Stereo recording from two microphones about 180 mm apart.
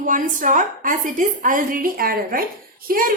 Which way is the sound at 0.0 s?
45° right (ahead or behind).